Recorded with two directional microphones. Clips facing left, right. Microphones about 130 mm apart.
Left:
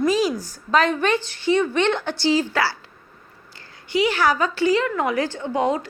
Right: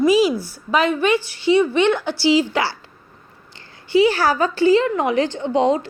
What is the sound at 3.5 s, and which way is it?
A woman's voice, 30° right (ahead or behind).